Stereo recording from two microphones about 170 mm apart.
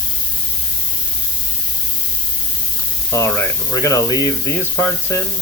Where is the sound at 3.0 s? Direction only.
15° left (ahead or behind).